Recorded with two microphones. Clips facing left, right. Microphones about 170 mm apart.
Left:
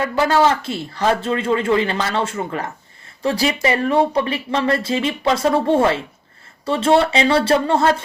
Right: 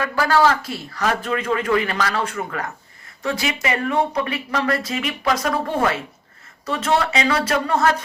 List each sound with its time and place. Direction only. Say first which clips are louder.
0.0 s speech: left 2 dB; 25° left (ahead or behind)